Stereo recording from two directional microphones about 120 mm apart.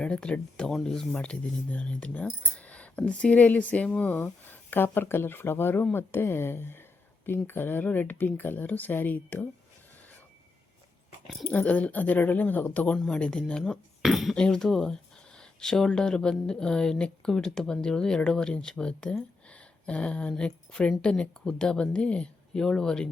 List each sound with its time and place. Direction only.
0.0 s speech: 10° left (ahead or behind)
11.4 s speech: 15° left (ahead or behind)